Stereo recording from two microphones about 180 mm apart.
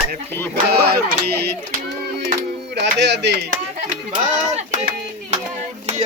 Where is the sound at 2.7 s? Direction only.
70° right (ahead or behind).